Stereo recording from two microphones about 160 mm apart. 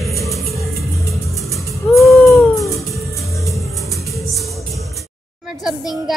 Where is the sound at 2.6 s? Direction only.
Centre (ahead or behind).